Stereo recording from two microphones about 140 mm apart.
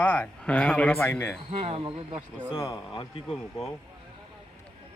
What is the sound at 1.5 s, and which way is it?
Speech, 50° right (ahead or behind).